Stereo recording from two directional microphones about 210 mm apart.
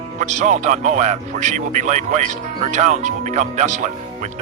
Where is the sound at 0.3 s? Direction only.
35° right (ahead or behind).